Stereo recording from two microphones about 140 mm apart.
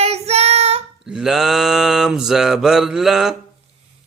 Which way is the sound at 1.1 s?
5° right (ahead or behind).